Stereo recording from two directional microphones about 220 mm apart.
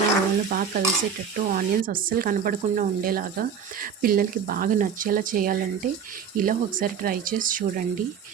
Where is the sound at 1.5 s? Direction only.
40° right (ahead or behind).